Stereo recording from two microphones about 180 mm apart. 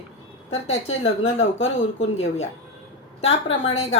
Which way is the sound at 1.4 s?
90° left.